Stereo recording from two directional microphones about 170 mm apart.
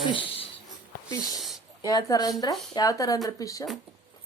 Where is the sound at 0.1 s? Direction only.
30° left (ahead or behind).